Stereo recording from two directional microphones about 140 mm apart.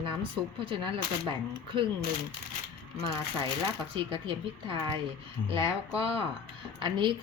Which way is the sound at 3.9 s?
40° right (ahead or behind).